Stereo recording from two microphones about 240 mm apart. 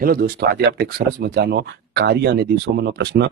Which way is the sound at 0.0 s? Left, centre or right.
Right.